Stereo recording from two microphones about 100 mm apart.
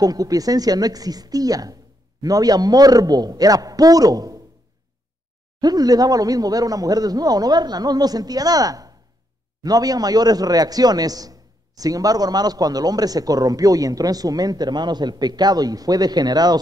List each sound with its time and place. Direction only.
0.0 s a man's voice: 40° right (ahead or behind)
5.6 s a man's voice: 40° right (ahead or behind)